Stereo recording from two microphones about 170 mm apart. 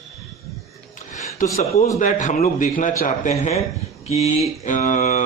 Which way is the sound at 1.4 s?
50° left (ahead or behind).